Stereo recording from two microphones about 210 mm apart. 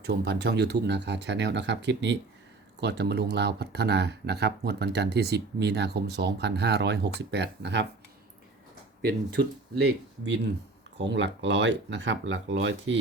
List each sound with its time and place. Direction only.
0.1 s speech: 50° right (ahead or behind)
9.0 s speech: 50° right (ahead or behind)